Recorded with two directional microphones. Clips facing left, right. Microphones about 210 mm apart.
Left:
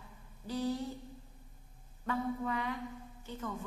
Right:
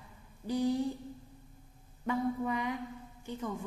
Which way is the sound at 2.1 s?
15° right (ahead or behind).